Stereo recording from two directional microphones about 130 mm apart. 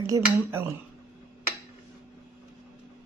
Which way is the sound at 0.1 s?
20° right (ahead or behind).